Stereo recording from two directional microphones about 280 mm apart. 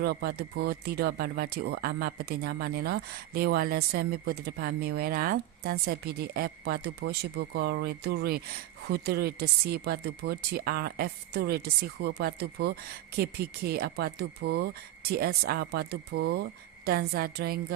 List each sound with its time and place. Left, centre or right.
0.0 s speech: right